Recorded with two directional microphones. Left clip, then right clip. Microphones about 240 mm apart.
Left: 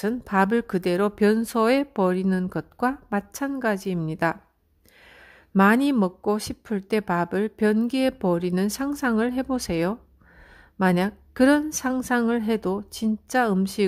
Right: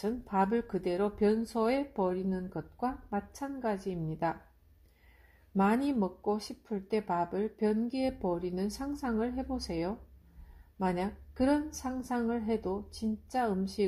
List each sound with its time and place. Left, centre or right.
0.0 s speech: left
5.6 s speech: left